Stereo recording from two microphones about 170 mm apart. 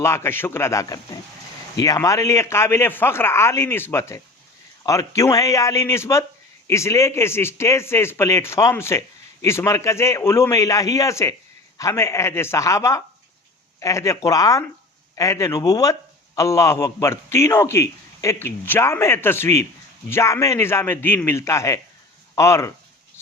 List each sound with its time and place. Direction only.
0.0 s a man's voice: 15° left (ahead or behind)